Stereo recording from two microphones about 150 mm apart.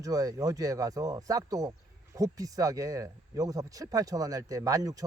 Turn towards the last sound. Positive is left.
turn(degrees=-25)  # may be behind; listen again after turning